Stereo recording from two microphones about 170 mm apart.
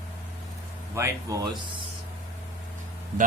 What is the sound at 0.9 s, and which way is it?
Speech, 20° right (ahead or behind).